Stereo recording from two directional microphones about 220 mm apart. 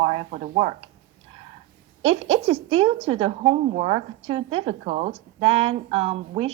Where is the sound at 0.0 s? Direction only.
30° right (ahead or behind).